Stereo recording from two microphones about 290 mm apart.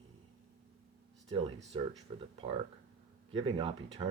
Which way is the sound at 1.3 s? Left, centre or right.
Centre.